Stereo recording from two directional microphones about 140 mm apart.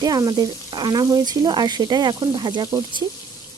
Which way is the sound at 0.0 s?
25° right (ahead or behind).